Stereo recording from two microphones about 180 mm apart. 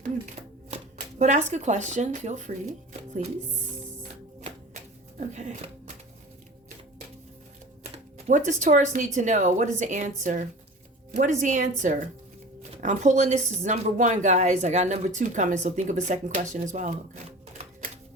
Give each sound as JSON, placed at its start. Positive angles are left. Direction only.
{"t": 0.7, "sound": "speech", "side_deg": -40}
{"t": 4.1, "sound": "music", "side_deg": -40}
{"t": 5.2, "sound": "speech", "side_deg": -40}
{"t": 8.3, "sound": "a woman's voice", "side_deg": -45}